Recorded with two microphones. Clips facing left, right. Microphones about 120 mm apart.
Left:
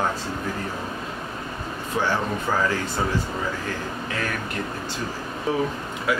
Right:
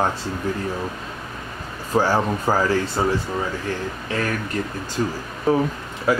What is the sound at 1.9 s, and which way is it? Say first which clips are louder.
Speech: right 5 dB; 40° right (ahead or behind).